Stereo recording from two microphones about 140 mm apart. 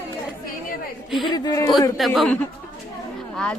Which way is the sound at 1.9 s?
Centre (ahead or behind).